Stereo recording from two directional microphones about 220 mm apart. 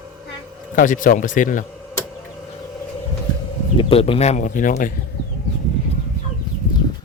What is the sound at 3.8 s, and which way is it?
Speech, 25° left (ahead or behind).